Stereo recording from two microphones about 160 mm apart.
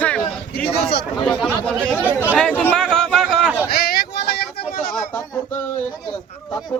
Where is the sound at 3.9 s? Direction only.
75° left (ahead or behind).